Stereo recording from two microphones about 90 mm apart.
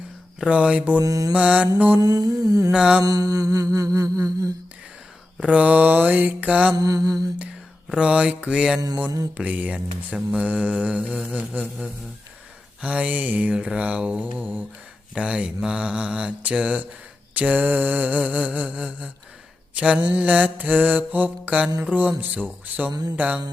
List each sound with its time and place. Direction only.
0.3 s mantra: 15° right (ahead or behind)
1.0 s mantra: 40° right (ahead or behind)
1.3 s mantra: 15° right (ahead or behind)
2.0 s mantra: 45° right (ahead or behind)
2.7 s mantra: 10° right (ahead or behind)
3.0 s mantra: 45° right (ahead or behind)
5.4 s mantra: 15° right (ahead or behind)
6.7 s mantra: 45° right (ahead or behind)
7.9 s mantra: 10° right (ahead or behind)
12.8 s mantra: 15° right (ahead or behind)
22.2 s speech: 20° right (ahead or behind)
22.9 s mantra: 45° right (ahead or behind)
23.1 s mantra: 15° right (ahead or behind)